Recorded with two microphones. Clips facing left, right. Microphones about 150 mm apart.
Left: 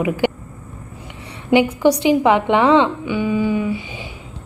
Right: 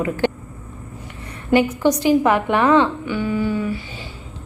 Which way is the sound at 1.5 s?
15° left (ahead or behind).